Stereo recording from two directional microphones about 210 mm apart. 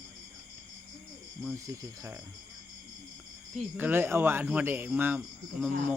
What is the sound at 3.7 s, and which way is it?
Speech, 10° right (ahead or behind).